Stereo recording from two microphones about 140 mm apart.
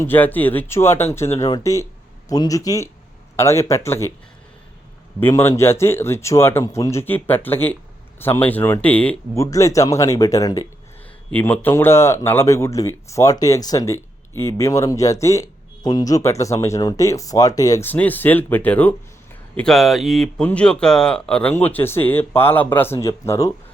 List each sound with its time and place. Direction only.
0.0 s speech: 15° left (ahead or behind)
5.2 s speech: 15° left (ahead or behind)
9.3 s speech: 20° left (ahead or behind)
11.3 s speech: 10° left (ahead or behind)
17.8 s speech: 10° left (ahead or behind)
19.5 s speech: 5° left (ahead or behind); by 23.5 s 20° left (ahead or behind)